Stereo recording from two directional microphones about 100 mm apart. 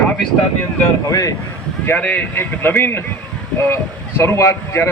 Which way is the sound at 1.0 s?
35° left (ahead or behind).